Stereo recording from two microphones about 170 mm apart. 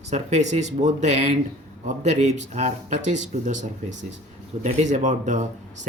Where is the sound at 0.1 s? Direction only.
45° right (ahead or behind).